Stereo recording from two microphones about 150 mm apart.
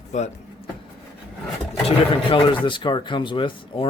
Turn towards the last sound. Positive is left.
turn(degrees=35)  # may be behind; listen again after turning